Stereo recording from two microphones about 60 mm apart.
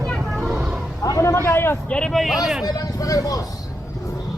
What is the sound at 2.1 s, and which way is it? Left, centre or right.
Speech, centre.